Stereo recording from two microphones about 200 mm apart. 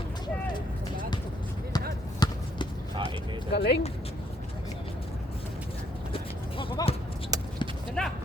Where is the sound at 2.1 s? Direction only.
20° left (ahead or behind).